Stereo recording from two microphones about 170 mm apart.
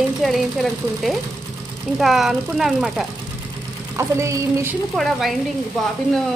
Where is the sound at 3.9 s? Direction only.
15° right (ahead or behind).